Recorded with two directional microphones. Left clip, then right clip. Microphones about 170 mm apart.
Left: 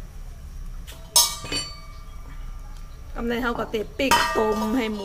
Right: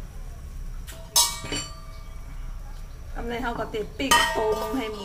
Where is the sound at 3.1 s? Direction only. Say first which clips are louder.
Left 4 dB; 60° left (ahead or behind).